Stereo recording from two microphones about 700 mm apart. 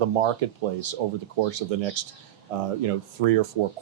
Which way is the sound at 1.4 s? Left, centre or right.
Right.